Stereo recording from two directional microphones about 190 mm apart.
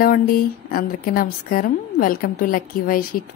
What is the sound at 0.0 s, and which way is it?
Speech, 50° left (ahead or behind).